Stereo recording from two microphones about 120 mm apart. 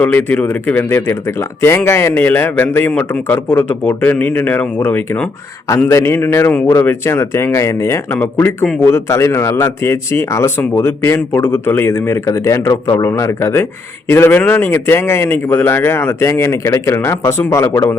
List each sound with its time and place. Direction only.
0.0 s speech: 15° left (ahead or behind)